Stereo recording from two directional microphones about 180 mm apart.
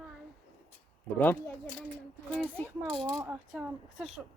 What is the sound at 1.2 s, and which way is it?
Speech, 10° left (ahead or behind).